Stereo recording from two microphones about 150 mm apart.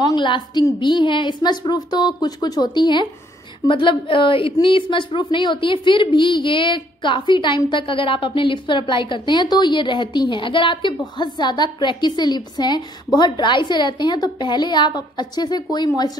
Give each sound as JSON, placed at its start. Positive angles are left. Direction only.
{"t": 0.0, "sound": "a woman's voice", "side_deg": 30}